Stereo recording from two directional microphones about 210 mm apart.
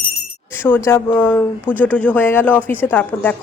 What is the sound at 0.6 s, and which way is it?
Speech, 10° left (ahead or behind).